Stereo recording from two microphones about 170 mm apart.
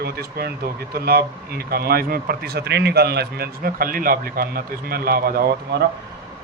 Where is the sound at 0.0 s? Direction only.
65° right (ahead or behind).